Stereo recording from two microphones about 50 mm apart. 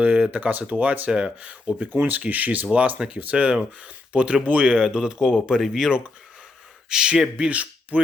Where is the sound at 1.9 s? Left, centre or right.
Right; by 5.4 s centre.